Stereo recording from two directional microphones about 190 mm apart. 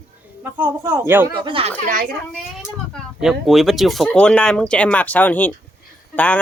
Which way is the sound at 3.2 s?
Centre (ahead or behind).